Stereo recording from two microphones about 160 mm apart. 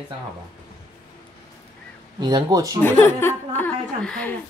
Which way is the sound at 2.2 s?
30° right (ahead or behind).